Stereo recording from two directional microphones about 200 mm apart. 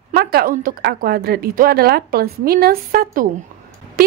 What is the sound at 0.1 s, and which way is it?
A woman's voice, 50° right (ahead or behind).